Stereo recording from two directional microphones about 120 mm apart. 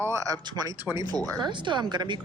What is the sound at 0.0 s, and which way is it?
Speech, 25° right (ahead or behind).